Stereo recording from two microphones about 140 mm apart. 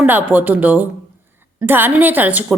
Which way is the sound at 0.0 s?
10° right (ahead or behind).